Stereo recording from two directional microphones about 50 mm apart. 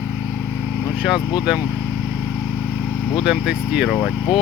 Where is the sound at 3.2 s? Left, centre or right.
Centre.